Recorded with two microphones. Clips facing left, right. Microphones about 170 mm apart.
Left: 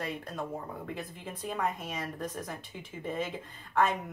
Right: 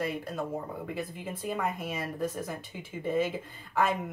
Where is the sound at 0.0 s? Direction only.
5° right (ahead or behind).